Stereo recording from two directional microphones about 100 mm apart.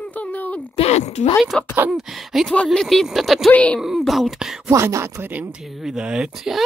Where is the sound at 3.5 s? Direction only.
15° left (ahead or behind).